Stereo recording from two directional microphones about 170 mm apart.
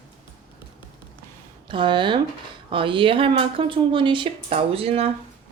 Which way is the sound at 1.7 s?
30° right (ahead or behind).